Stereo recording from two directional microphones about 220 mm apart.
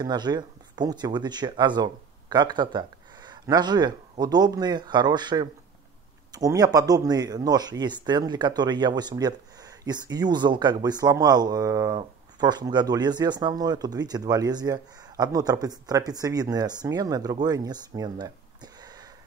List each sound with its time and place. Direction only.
0.0 s speech: 20° right (ahead or behind)